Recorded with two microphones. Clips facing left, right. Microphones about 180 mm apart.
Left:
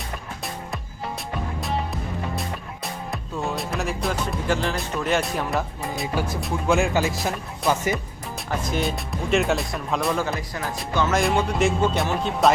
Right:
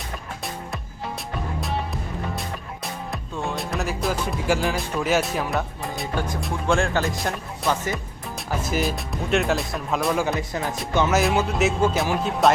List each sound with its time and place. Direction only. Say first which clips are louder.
1.6 s music: left 1 dB; centre (ahead or behind)
8.4 s speech: right 1 dB; 5° right (ahead or behind)
10.2 s speech: right 3 dB; 20° right (ahead or behind)
11.1 s speech: right 1 dB; 5° right (ahead or behind)